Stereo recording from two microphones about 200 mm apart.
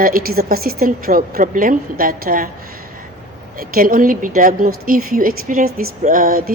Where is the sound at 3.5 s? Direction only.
45° right (ahead or behind).